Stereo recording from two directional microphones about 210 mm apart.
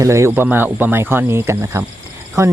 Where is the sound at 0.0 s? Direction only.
15° right (ahead or behind).